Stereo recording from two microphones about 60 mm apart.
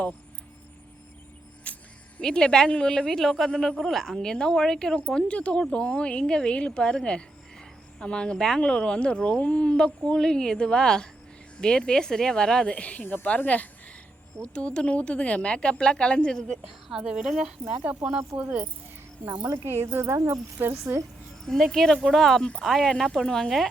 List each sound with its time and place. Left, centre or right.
1.7 s music: left
2.2 s speech: centre
4.9 s speech: left
16.6 s a woman's voice: centre
17.7 s speech: right
19.6 s speech: right
20.1 s speech: right
20.6 s speech: right
21.4 s speech: centre